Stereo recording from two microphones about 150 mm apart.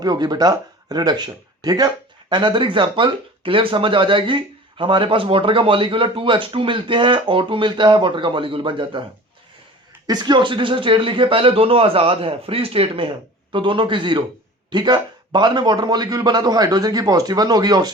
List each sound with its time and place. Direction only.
0.0 s speech: 25° right (ahead or behind)
10.1 s a man's voice: 30° right (ahead or behind)